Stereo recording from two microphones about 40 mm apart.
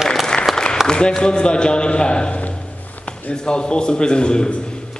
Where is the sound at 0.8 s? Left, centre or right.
Left.